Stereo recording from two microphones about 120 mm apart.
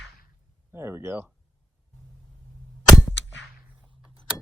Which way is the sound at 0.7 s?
20° right (ahead or behind).